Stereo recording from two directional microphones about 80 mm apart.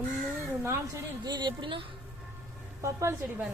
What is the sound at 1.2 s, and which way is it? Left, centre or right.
Speech, right.